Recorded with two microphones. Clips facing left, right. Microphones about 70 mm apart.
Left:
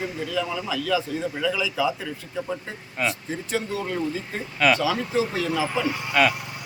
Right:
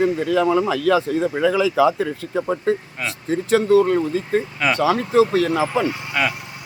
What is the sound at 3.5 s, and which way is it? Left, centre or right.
Speech, right.